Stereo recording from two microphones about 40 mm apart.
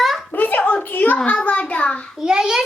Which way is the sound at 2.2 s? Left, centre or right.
Centre.